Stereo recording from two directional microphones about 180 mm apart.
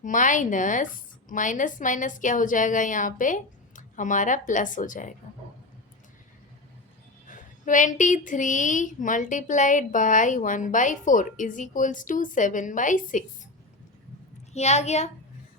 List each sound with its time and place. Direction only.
0.0 s speech: 45° left (ahead or behind)
7.3 s speech: 45° left (ahead or behind)
14.5 s a woman's voice: 40° left (ahead or behind)